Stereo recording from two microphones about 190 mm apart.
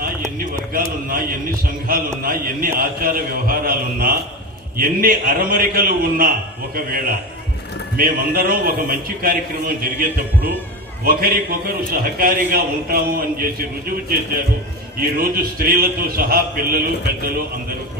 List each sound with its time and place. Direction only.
0.7 s a man's voice: 50° right (ahead or behind)
15.2 s a man's voice: 50° right (ahead or behind)